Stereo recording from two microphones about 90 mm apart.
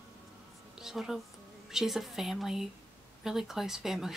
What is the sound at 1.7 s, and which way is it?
Speech, 5° right (ahead or behind).